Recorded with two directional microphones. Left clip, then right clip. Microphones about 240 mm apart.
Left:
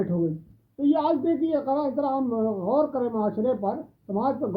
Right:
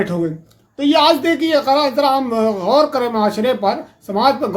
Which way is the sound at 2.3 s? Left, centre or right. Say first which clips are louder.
Right 10 dB; right.